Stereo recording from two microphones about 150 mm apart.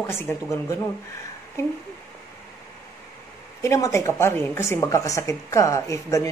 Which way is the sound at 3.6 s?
20° left (ahead or behind).